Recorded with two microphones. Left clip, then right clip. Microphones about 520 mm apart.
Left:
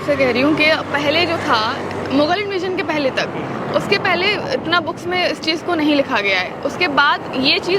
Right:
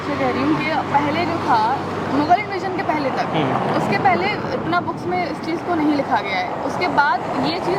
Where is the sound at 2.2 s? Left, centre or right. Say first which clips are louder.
Right 1 dB; centre.